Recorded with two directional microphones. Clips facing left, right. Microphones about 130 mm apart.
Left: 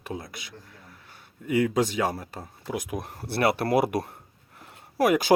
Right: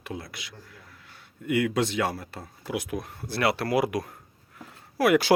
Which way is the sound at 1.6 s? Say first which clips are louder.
Left 1 dB; 20° left (ahead or behind).